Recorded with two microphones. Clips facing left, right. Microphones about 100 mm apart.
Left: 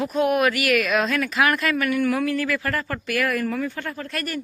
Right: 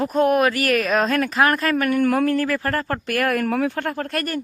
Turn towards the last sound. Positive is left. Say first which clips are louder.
# right 4 dB
turn(degrees=-45)  # may be behind; listen again after turning